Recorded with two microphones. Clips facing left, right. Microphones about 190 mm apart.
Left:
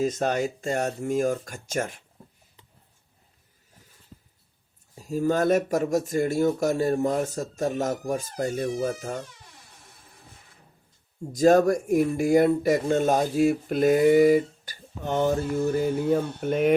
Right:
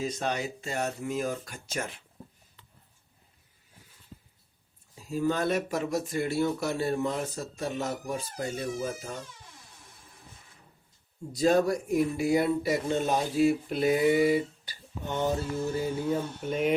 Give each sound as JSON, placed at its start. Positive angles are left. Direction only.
{"t": 0.0, "sound": "speech", "side_deg": 45}
{"t": 4.9, "sound": "speech", "side_deg": 45}
{"t": 11.3, "sound": "speech", "side_deg": 45}